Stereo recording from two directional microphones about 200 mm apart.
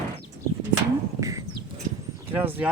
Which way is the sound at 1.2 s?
15° right (ahead or behind).